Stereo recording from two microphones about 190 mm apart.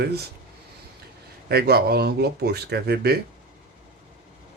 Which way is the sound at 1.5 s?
55° right (ahead or behind).